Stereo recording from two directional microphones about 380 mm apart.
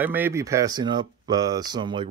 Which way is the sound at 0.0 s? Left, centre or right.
Centre.